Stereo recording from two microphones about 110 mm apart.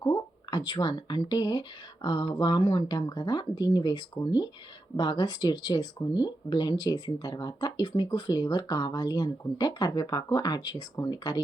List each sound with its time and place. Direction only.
0.0 s speech: 35° left (ahead or behind)